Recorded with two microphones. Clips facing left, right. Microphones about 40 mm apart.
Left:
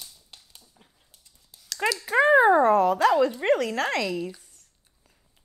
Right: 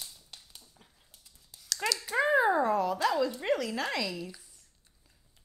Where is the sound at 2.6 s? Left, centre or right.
Left.